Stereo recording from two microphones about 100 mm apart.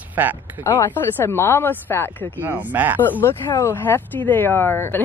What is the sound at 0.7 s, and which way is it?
Speech, 20° left (ahead or behind).